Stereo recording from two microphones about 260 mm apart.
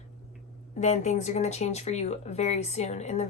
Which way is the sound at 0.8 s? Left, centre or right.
Left.